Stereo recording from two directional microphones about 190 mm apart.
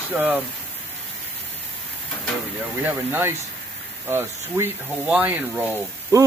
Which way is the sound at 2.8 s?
10° right (ahead or behind).